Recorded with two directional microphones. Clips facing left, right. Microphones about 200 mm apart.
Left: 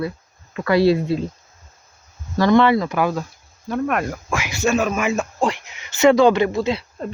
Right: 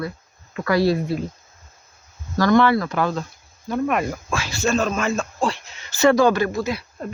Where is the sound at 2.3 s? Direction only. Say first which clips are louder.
Left 2 dB; 25° left (ahead or behind).